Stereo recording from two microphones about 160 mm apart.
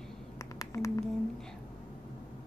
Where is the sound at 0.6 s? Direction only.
20° left (ahead or behind).